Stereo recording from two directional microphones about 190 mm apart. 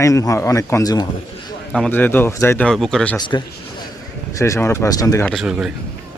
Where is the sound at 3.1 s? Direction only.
25° left (ahead or behind).